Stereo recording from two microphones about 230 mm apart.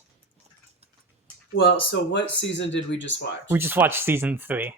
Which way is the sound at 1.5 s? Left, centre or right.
Left.